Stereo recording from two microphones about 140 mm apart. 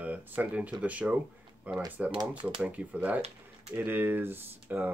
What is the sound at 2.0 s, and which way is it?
Speech, 35° right (ahead or behind).